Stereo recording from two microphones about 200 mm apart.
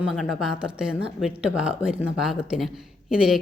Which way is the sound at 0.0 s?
Centre (ahead or behind).